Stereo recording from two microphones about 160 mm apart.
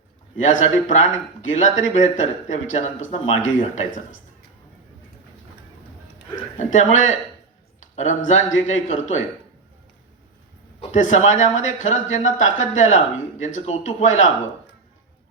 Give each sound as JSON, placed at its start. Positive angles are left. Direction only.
{"t": 0.3, "sound": "speech", "side_deg": 50}
{"t": 6.6, "sound": "speech", "side_deg": 50}
{"t": 10.8, "sound": "speech", "side_deg": 50}